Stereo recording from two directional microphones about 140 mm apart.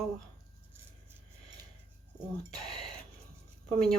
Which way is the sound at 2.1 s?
30° right (ahead or behind).